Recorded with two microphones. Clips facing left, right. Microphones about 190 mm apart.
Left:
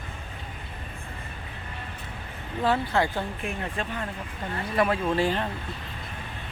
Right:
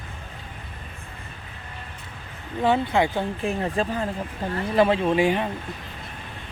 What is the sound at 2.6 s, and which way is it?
Speech, 20° right (ahead or behind).